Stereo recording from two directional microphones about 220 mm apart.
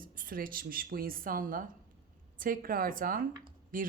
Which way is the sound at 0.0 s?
40° right (ahead or behind).